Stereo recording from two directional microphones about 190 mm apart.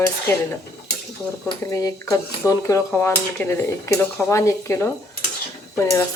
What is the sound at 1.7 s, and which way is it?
Speech, 15° left (ahead or behind).